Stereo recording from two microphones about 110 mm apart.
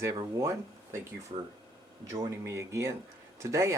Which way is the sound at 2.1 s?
35° right (ahead or behind).